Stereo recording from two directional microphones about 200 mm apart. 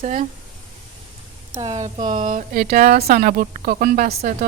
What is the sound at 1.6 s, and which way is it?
A woman's voice, 35° right (ahead or behind).